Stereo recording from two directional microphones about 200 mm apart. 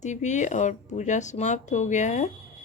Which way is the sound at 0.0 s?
35° left (ahead or behind).